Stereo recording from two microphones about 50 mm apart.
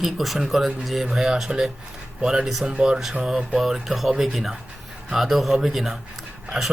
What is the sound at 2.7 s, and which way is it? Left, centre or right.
Speech, centre.